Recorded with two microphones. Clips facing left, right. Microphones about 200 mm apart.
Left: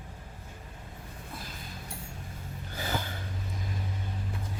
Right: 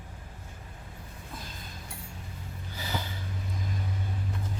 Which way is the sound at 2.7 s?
50° left (ahead or behind).